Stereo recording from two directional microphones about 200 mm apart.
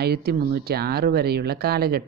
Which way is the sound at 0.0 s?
50° right (ahead or behind).